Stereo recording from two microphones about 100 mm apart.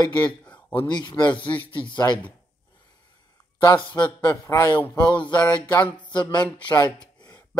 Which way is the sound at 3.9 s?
50° left (ahead or behind).